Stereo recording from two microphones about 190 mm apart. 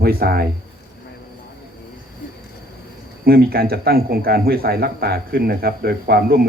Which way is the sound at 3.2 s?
55° right (ahead or behind).